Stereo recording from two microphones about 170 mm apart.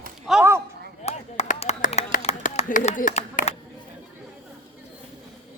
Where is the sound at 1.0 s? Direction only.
40° left (ahead or behind).